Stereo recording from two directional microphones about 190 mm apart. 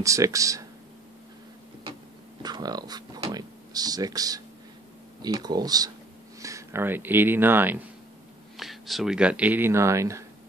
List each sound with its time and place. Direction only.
0.0 s speech: 15° right (ahead or behind)
2.4 s speech: 20° right (ahead or behind)